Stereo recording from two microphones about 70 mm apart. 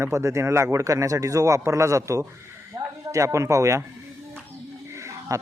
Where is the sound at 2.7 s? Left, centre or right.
Right.